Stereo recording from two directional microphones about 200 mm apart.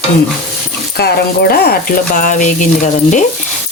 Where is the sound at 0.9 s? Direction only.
50° left (ahead or behind).